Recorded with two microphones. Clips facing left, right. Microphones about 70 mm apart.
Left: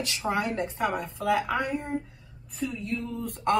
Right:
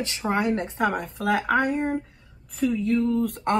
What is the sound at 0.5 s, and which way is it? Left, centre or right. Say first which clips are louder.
Speech: right 3 dB; right.